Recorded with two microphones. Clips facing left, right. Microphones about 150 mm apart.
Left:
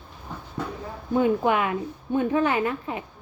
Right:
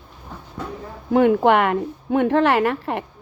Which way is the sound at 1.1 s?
70° right (ahead or behind).